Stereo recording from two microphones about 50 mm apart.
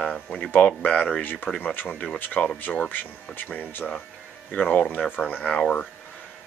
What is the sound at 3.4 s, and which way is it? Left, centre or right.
Speech, left.